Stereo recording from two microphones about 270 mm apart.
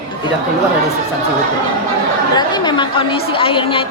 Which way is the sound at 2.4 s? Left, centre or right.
Centre.